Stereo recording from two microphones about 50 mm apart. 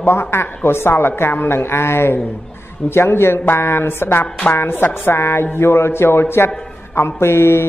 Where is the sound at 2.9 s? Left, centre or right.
Left.